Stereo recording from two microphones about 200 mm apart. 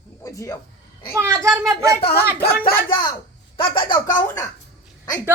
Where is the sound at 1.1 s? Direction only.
15° right (ahead or behind).